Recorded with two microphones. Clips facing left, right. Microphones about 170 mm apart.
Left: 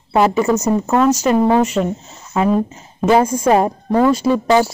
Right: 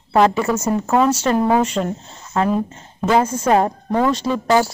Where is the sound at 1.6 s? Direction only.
10° left (ahead or behind).